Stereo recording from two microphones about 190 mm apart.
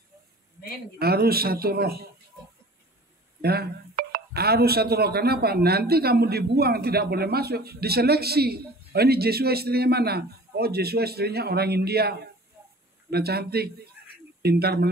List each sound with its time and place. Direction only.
0.9 s speech: 55° right (ahead or behind)
3.4 s speech: 55° right (ahead or behind)